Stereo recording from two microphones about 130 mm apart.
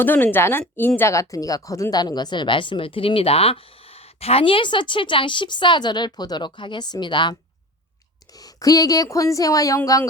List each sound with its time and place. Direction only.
0.0 s a woman's voice: 15° left (ahead or behind)